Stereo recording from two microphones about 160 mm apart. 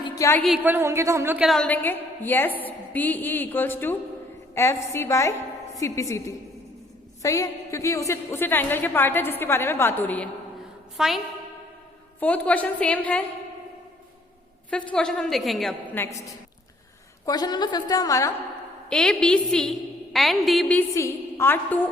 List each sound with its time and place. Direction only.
0.0 s a sound: 20° left (ahead or behind)
0.6 s a woman's voice: 15° right (ahead or behind)
1.5 s a woman's voice: 5° left (ahead or behind)
10.9 s a woman's voice: centre (ahead or behind)
12.2 s a woman's voice: 10° left (ahead or behind)
14.7 s a woman's voice: 5° left (ahead or behind)
16.0 s a woman's voice: 15° left (ahead or behind)
17.2 s a woman's voice: 25° left (ahead or behind)
18.9 s a woman's voice: 5° left (ahead or behind)
20.7 s a woman's voice: 15° left (ahead or behind)